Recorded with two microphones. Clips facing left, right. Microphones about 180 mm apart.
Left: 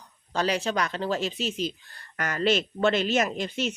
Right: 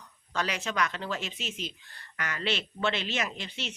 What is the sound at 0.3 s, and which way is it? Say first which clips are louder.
A woman's voice: left 5 dB; 35° left (ahead or behind).